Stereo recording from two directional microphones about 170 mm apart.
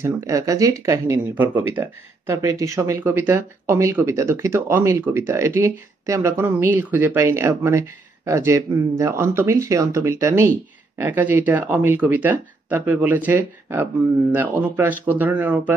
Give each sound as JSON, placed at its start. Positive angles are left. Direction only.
{"t": 0.0, "sound": "speech", "side_deg": -20}